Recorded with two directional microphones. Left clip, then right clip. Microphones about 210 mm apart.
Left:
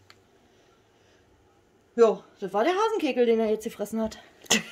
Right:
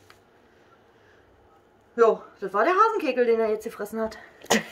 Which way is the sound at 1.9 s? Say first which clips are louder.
Right 1 dB; 50° left (ahead or behind).